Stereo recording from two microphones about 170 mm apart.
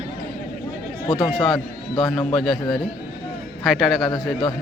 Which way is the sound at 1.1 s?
25° left (ahead or behind).